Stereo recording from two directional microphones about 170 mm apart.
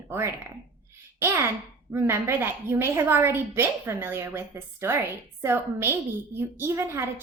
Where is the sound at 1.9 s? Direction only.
15° right (ahead or behind).